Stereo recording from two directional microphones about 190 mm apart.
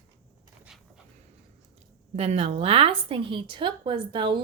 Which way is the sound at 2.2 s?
35° right (ahead or behind).